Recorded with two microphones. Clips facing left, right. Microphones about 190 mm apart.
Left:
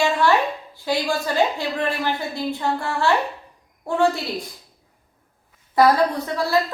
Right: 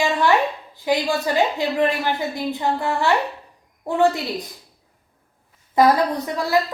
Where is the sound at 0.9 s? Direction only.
15° right (ahead or behind).